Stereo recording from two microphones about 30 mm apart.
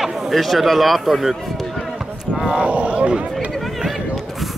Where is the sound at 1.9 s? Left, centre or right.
Centre.